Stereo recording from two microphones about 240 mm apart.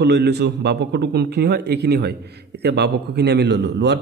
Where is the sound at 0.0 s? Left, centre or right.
Right.